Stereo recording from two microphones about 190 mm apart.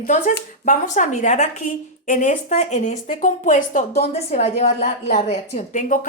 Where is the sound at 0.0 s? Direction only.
45° left (ahead or behind).